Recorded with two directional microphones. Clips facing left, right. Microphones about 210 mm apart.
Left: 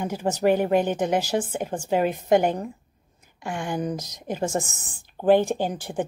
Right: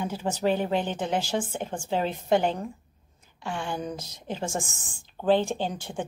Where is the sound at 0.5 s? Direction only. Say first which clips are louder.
Left 6 dB; 10° left (ahead or behind).